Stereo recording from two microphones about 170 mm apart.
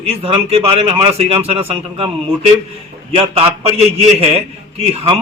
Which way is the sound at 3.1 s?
35° right (ahead or behind).